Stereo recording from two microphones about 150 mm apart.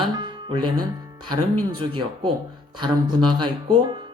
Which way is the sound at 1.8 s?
35° right (ahead or behind).